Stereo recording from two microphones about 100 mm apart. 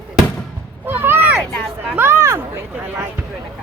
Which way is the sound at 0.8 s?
20° right (ahead or behind).